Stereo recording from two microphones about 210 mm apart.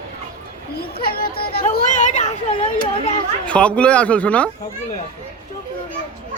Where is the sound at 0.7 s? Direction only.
45° left (ahead or behind).